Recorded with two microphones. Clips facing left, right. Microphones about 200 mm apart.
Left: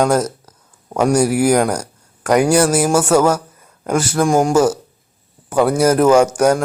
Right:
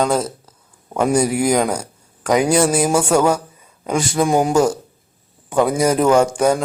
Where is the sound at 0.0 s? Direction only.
10° left (ahead or behind).